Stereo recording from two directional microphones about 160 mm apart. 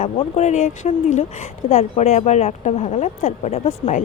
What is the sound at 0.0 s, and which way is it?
Speech, 45° left (ahead or behind).